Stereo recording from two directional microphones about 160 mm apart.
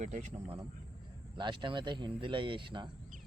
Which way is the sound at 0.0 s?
45° right (ahead or behind).